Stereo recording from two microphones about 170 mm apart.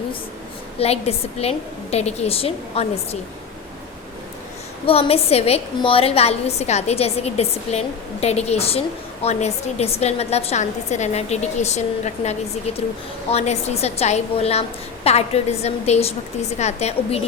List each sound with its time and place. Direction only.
0.8 s a woman's voice: 35° left (ahead or behind)
4.9 s a woman's voice: 35° left (ahead or behind)